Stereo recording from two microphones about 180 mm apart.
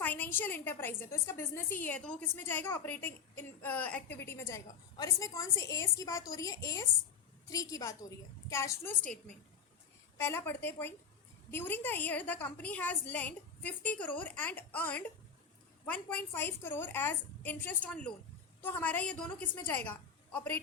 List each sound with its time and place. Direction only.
0.0 s a woman's voice: 10° left (ahead or behind)